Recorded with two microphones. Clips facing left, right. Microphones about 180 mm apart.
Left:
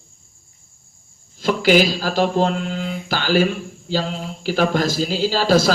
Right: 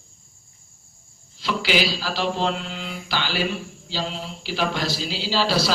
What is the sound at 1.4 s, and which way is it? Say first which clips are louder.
Mantra: left 8 dB; 45° left (ahead or behind).